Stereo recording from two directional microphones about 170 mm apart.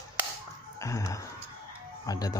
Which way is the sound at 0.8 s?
20° left (ahead or behind).